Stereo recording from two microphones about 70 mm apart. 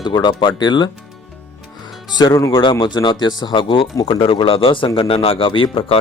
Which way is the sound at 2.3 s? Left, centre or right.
Left.